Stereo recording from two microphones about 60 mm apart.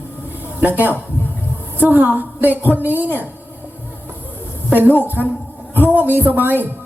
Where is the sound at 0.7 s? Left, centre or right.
Right.